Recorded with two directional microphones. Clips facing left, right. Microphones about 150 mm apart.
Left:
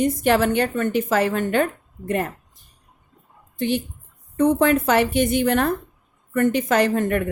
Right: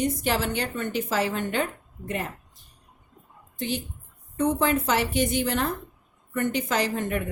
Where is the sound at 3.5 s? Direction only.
60° left (ahead or behind).